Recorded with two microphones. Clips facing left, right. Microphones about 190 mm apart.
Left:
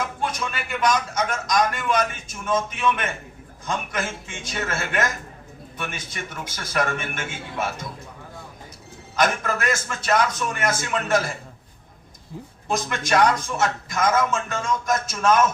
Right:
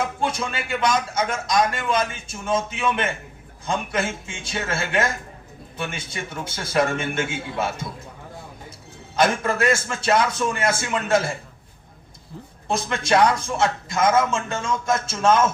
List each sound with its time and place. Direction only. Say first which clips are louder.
0.2 s a man's voice: right 2 dB; 30° right (ahead or behind)
9.1 s a man's voice: right 2 dB; 30° right (ahead or behind)
12.6 s a man's voice: right 2 dB; 30° right (ahead or behind)